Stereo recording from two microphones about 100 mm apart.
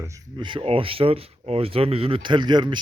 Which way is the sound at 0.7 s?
70° right (ahead or behind).